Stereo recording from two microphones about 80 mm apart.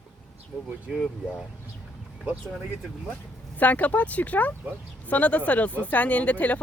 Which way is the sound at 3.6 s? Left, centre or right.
Centre.